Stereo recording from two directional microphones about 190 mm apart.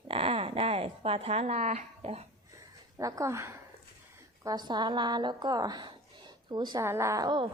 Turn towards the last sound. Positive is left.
turn(degrees=-20)  # may be behind; listen again after turning